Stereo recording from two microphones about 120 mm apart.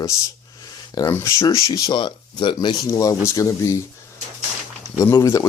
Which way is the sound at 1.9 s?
40° left (ahead or behind).